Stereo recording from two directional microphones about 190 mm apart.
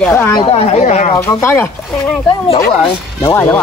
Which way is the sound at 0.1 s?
20° left (ahead or behind).